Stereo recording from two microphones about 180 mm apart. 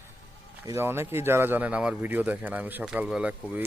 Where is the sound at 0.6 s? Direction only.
15° right (ahead or behind).